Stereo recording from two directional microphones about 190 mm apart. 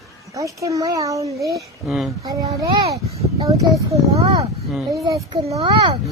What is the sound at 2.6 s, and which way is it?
Speech, 15° right (ahead or behind).